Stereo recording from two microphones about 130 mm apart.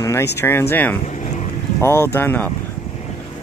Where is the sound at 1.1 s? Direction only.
70° left (ahead or behind).